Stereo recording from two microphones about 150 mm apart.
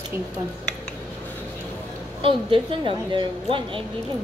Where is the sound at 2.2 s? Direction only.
35° right (ahead or behind).